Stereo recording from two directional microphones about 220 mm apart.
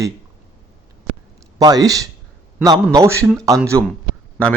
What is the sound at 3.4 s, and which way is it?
Speech, 15° right (ahead or behind).